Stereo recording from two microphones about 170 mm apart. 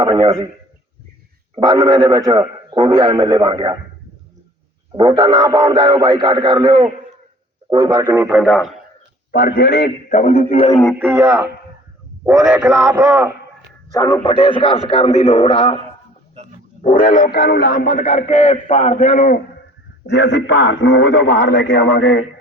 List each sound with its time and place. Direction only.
0.0 s a man's voice: 30° right (ahead or behind)
1.5 s a man's voice: 25° right (ahead or behind)
5.0 s a man's voice: 25° right (ahead or behind); by 8.7 s centre (ahead or behind)
9.3 s a man's voice: 60° left (ahead or behind)
10.1 s a man's voice: 45° left (ahead or behind)
11.0 s speech: 15° right (ahead or behind)
12.5 s speech: 15° right (ahead or behind)
14.0 s a man's voice: 30° left (ahead or behind)
16.8 s a man's voice: 50° left (ahead or behind)
20.1 s a man's voice: 90° left; by 22.2 s 70° left (ahead or behind)